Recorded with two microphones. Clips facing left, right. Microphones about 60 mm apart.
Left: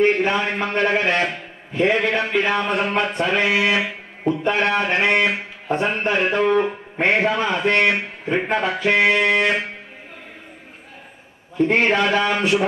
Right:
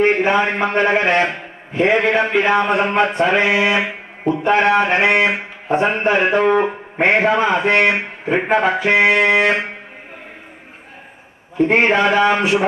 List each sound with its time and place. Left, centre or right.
0.0 s a man's voice: centre
8.5 s music: centre
11.5 s music: centre